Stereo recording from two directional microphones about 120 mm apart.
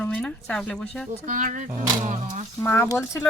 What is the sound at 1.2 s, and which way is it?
Speech, 90° right.